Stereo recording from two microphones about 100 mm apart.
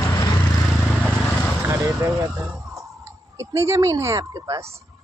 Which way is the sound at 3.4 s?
30° right (ahead or behind).